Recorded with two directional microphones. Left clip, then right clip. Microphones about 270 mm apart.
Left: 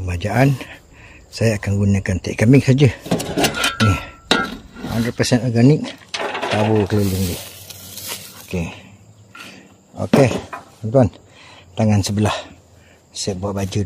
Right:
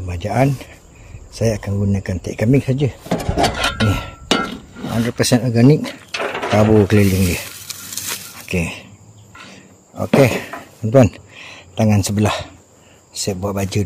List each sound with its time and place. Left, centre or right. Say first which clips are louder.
0.0 s speech: even; centre
2.6 s a sound: left 4 dB; left
3.9 s dishes: even; centre
4.3 s dishes: left 1 dB; centre
6.1 s sewing machine: right 1 dB; left
6.9 s frying: right 5 dB; centre
8.5 s speech: right 5 dB; centre
9.5 s wild animals: even; centre
10.5 s a sound: right 1 dB; left
10.9 s speech: right 3 dB; centre